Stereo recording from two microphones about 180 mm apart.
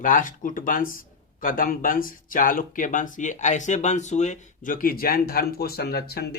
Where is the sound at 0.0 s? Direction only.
45° left (ahead or behind).